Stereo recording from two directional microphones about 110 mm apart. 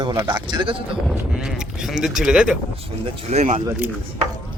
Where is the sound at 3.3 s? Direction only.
90° right.